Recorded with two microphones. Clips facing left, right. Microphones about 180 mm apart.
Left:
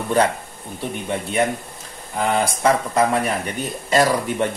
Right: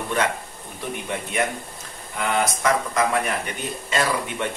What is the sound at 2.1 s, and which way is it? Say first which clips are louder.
Speech: left 3 dB; 30° left (ahead or behind).